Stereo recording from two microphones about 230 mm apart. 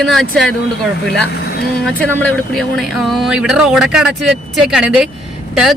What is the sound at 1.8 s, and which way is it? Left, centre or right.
Speech, centre.